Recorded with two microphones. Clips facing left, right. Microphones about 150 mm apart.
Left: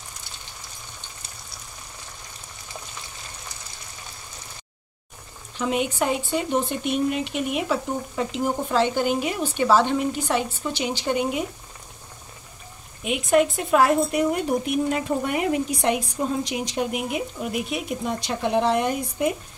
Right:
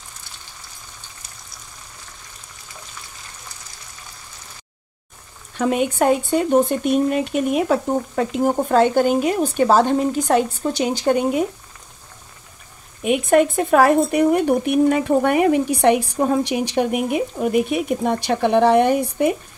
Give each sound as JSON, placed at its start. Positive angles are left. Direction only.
{"t": 5.6, "sound": "speech", "side_deg": -50}
{"t": 13.0, "sound": "speech", "side_deg": -50}
{"t": 17.4, "sound": "speech", "side_deg": -50}